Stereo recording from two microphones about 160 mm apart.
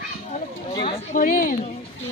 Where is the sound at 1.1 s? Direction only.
60° left (ahead or behind).